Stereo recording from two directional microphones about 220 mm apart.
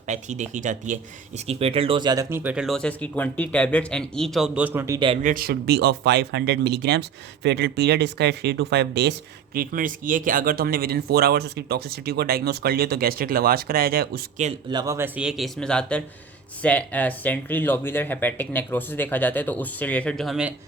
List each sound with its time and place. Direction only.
0.1 s speech: 30° right (ahead or behind); by 4.9 s 10° right (ahead or behind)
4.9 s speech: 25° right (ahead or behind)
5.2 s speech: 40° right (ahead or behind)
9.6 s speech: 40° right (ahead or behind)
14.4 s speech: 25° right (ahead or behind); by 20.5 s centre (ahead or behind)